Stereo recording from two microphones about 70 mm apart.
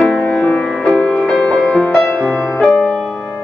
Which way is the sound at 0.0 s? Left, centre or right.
Left.